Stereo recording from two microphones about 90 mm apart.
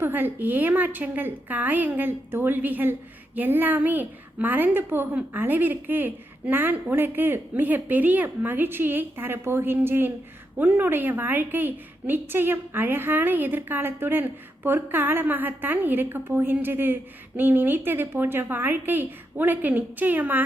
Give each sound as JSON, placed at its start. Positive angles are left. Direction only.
{"t": 0.0, "sound": "a woman's voice", "side_deg": -20}